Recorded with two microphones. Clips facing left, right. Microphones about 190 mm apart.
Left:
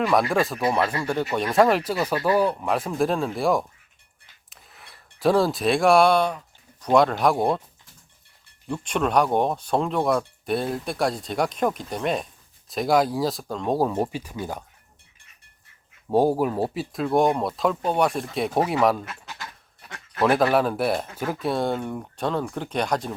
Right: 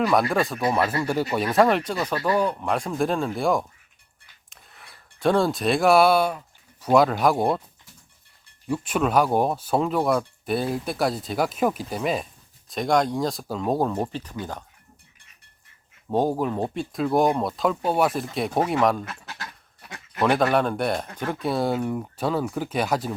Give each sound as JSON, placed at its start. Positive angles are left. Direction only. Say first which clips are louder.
{"t": 0.0, "sound": "speech", "louder": "even", "side_deg": 0}
{"t": 4.4, "sound": "a sound", "louder": "even", "side_deg": 0}
{"t": 6.8, "sound": "speech", "louder": "even", "side_deg": 0}
{"t": 8.6, "sound": "speech", "louder": "right 1 dB", "side_deg": -5}
{"t": 16.0, "sound": "speech", "louder": "left 3 dB", "side_deg": 10}